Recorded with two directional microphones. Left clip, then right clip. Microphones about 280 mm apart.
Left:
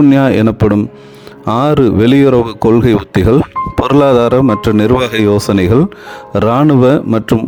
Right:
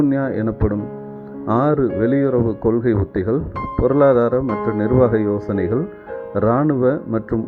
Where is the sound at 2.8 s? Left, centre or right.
Left.